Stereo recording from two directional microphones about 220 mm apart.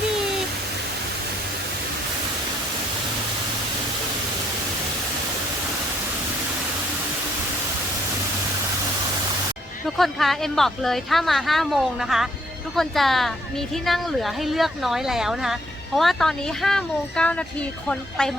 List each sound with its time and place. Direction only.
9.8 s speech: centre (ahead or behind)